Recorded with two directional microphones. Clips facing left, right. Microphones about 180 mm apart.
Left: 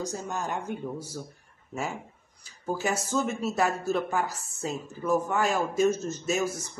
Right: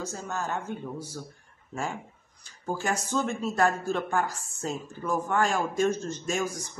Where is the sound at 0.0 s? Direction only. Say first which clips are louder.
Left 1 dB; 15° left (ahead or behind).